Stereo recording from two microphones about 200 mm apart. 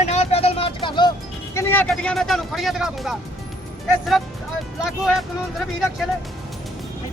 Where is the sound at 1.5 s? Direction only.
10° left (ahead or behind).